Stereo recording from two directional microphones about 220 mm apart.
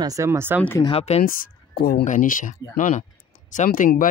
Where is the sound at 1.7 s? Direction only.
45° left (ahead or behind).